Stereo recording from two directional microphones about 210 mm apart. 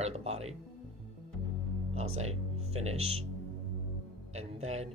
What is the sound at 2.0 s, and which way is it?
Speech, 30° right (ahead or behind).